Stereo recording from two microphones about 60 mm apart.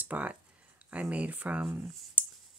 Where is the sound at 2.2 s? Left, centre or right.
Right.